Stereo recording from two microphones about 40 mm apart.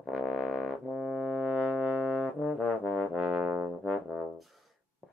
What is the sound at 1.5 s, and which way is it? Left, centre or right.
Music, right.